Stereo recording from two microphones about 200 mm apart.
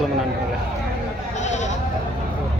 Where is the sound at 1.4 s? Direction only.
35° left (ahead or behind).